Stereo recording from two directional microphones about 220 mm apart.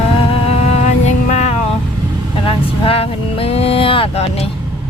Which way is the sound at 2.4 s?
25° left (ahead or behind).